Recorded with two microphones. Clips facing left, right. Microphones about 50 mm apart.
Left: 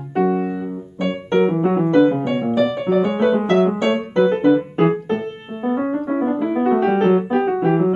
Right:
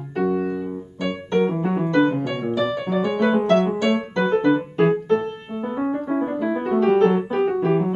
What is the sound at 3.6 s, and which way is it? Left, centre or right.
Music, left.